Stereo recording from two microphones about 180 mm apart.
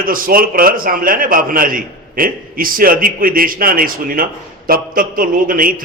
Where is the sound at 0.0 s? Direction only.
50° right (ahead or behind).